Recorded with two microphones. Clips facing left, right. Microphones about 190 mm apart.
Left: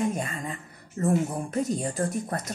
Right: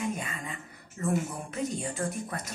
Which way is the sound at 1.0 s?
40° left (ahead or behind).